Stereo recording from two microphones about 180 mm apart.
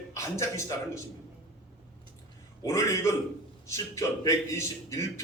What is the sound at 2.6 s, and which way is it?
A man's voice, 15° left (ahead or behind).